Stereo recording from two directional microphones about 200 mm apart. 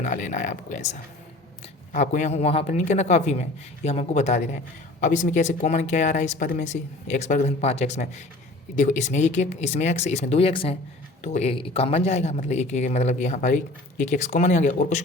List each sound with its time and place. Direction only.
0.0 s speech: 40° left (ahead or behind)
1.9 s speech: 35° left (ahead or behind)